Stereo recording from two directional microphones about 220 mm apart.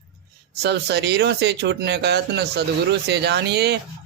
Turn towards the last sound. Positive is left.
turn(degrees=-50)  # may be behind; listen again after turning